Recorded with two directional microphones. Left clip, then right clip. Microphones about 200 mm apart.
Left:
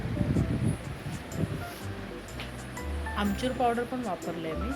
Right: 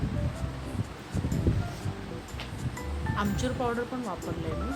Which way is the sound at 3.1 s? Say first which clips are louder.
Even; centre (ahead or behind).